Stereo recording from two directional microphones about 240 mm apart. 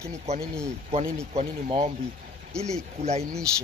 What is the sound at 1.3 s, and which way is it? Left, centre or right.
Speech, centre.